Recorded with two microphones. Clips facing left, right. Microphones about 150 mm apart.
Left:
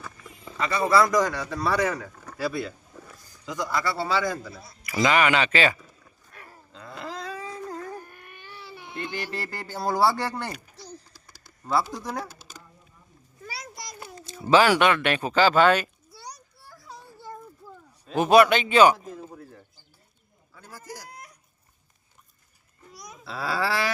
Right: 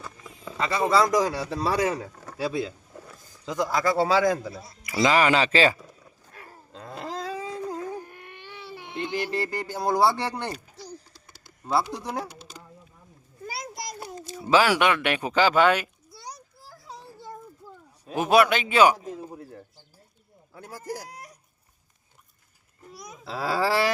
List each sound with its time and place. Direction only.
0.5 s speech: 25° right (ahead or behind)
3.8 s a man's voice: 45° right (ahead or behind)
4.9 s speech: 30° right (ahead or behind)
6.3 s wild animals: 30° right (ahead or behind)
7.3 s baby cry: 20° right (ahead or behind)
11.3 s a sound: 20° right (ahead or behind)
12.0 s speech: 25° right (ahead or behind)
13.7 s a sound: 50° right (ahead or behind)
14.3 s speech: 5° right (ahead or behind)
16.8 s children playing: 20° right (ahead or behind)
18.0 s speech: 5° right (ahead or behind)
19.4 s bird: 35° right (ahead or behind)
20.5 s speech: 50° right (ahead or behind)
22.9 s a sound: 35° right (ahead or behind)